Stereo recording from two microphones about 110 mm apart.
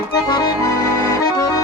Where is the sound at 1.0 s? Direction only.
35° left (ahead or behind).